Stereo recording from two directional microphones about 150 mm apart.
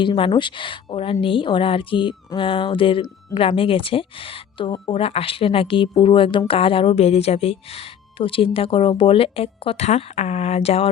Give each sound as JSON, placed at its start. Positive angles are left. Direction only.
{"t": 0.0, "sound": "a woman's voice", "side_deg": 35}